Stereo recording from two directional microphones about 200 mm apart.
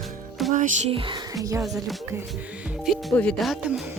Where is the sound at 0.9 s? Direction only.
25° right (ahead or behind).